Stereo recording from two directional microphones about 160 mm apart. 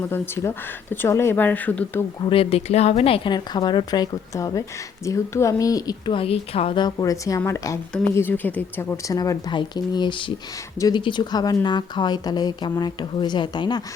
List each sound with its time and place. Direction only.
0.0 s speech: 15° left (ahead or behind)
2.2 s speech: 35° left (ahead or behind)